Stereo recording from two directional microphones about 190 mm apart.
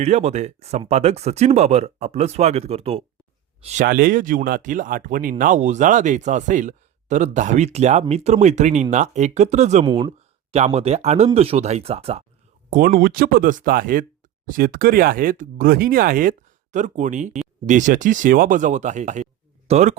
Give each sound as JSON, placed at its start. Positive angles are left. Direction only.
{"t": 0.0, "sound": "speech", "side_deg": -35}
{"t": 3.8, "sound": "speech", "side_deg": -50}
{"t": 9.8, "sound": "speech", "side_deg": -25}
{"t": 10.5, "sound": "speech", "side_deg": -35}
{"t": 12.7, "sound": "speech", "side_deg": -50}